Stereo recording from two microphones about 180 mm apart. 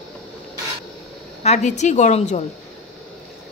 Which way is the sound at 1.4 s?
40° left (ahead or behind).